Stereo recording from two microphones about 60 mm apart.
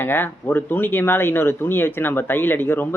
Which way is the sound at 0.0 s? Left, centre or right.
Left.